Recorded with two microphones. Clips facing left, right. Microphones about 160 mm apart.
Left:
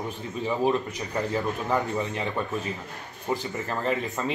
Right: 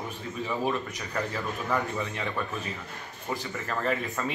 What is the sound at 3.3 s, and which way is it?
Speech, 25° left (ahead or behind).